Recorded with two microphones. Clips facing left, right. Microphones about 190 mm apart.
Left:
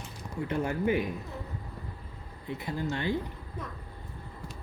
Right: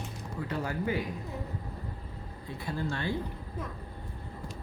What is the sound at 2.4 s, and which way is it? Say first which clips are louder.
Speech: left 2 dB; 20° left (ahead or behind).